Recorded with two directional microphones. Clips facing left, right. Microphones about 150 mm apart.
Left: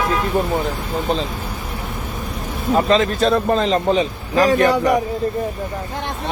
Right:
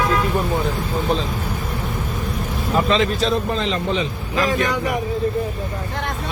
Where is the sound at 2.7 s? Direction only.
40° left (ahead or behind).